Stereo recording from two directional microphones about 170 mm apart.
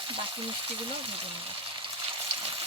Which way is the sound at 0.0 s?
30° right (ahead or behind).